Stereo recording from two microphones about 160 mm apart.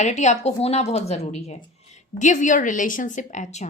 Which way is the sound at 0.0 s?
45° left (ahead or behind).